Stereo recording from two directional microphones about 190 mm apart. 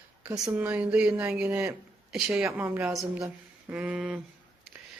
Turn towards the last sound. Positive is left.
turn(degrees=-5)  # may be behind; listen again after turning